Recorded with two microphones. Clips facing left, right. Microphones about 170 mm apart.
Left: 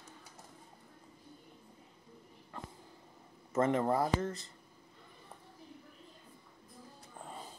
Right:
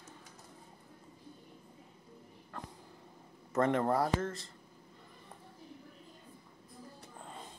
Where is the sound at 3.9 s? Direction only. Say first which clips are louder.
Even; 20° left (ahead or behind).